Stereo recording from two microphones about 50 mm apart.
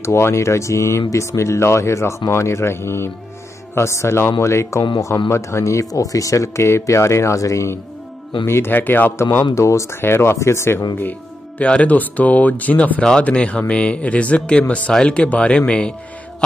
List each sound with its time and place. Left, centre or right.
0.0 s speech: left
8.5 s speech: left
8.7 s speech: left
9.4 s speech: left
9.9 s speech: left
10.3 s speech: left
11.0 s music: left
11.6 s speech: left